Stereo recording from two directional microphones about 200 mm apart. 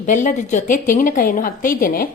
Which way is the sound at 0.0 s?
40° left (ahead or behind).